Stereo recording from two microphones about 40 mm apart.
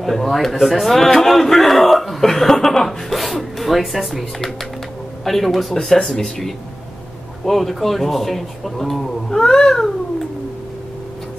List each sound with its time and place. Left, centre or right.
0.0 s a man's voice: centre